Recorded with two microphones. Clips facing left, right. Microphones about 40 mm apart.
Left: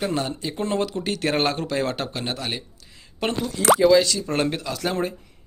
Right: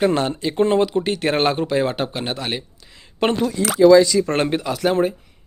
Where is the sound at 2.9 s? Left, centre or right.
Right.